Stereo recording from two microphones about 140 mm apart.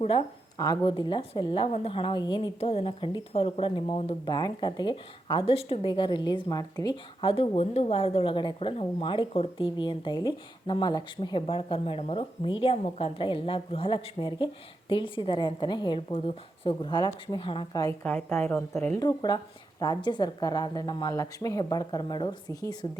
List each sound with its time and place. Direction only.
0.6 s speech: 30° left (ahead or behind)
1.6 s speech: 45° left (ahead or behind)
18.0 s speech: 10° left (ahead or behind)
18.9 s speech: 30° left (ahead or behind)